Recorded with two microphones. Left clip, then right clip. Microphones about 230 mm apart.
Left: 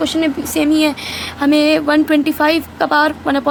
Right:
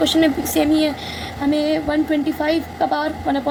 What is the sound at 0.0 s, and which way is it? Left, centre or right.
A woman's voice, centre.